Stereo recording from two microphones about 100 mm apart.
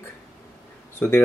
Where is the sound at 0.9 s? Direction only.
20° left (ahead or behind).